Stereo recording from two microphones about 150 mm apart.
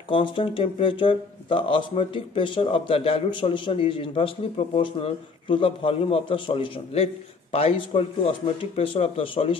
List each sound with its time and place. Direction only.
0.1 s speech: 35° left (ahead or behind)